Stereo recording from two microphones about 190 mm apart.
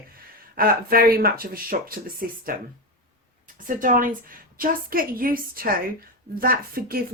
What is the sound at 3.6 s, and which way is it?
Speech, 45° right (ahead or behind).